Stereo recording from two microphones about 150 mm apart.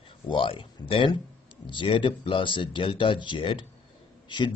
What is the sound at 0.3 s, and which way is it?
Speech, 35° left (ahead or behind).